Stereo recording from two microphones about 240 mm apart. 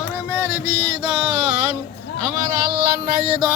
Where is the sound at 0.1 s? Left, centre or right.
Centre.